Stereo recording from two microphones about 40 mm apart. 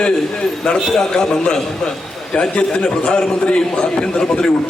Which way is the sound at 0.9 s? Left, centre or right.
Centre.